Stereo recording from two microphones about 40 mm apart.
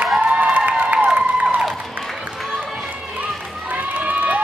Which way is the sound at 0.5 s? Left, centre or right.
Right.